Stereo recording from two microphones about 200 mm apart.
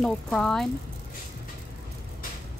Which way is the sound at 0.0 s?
Centre (ahead or behind).